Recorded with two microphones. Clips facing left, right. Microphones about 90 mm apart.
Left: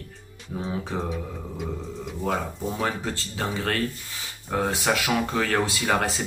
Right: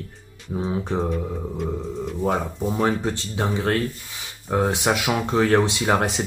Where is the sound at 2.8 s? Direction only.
20° right (ahead or behind).